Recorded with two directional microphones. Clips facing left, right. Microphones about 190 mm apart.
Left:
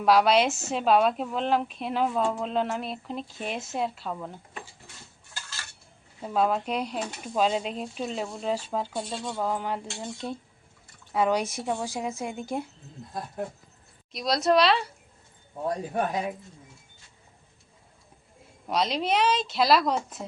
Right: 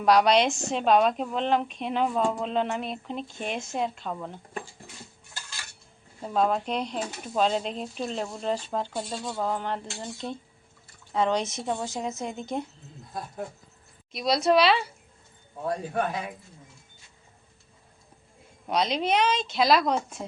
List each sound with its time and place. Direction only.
0.0 s speech: 5° left (ahead or behind)
6.2 s speech: 5° left (ahead or behind)
14.1 s speech: centre (ahead or behind)
15.6 s speech: 20° left (ahead or behind)
18.7 s speech: centre (ahead or behind)